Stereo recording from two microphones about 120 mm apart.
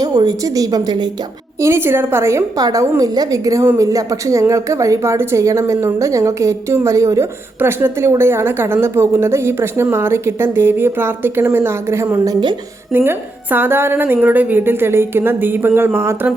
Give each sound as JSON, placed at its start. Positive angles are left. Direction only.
{"t": 0.0, "sound": "a woman's voice", "side_deg": -35}
{"t": 1.6, "sound": "a woman's voice", "side_deg": -20}
{"t": 12.2, "sound": "a woman's voice", "side_deg": -35}
{"t": 12.9, "sound": "a woman's voice", "side_deg": -15}